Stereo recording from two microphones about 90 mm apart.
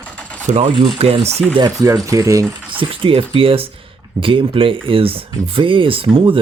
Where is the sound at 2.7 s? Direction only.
75° right (ahead or behind).